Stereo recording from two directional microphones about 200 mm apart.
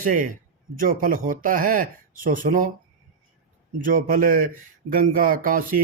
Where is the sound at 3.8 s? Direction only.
45° right (ahead or behind).